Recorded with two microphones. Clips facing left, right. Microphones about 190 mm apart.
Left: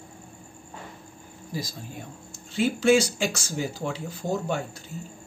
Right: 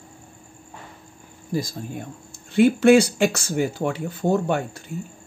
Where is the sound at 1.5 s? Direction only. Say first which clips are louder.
Right 8 dB; 50° right (ahead or behind).